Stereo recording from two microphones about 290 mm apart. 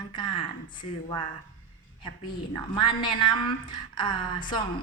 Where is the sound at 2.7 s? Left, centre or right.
Centre.